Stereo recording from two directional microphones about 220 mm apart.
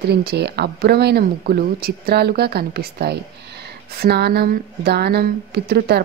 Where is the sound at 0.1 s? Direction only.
45° right (ahead or behind).